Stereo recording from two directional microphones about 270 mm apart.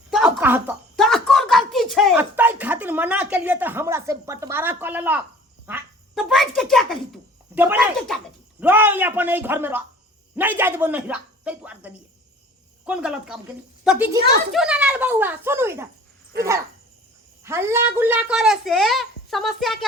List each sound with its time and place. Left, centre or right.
0.1 s a sound: centre
6.6 s a woman's voice: centre
16.3 s speech: right
17.4 s a woman's voice: centre